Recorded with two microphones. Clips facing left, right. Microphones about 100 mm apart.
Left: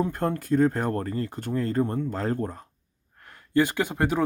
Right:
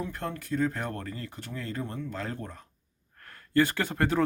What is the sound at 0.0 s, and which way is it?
Speech, 45° left (ahead or behind).